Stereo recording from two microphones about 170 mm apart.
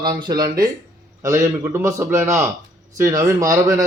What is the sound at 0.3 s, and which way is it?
A man's voice, 20° right (ahead or behind).